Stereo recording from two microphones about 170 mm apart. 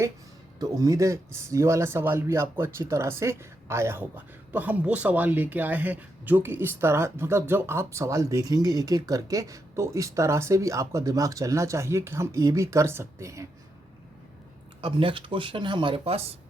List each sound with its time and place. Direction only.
0.6 s speech: 20° right (ahead or behind)
14.8 s speech: 30° right (ahead or behind)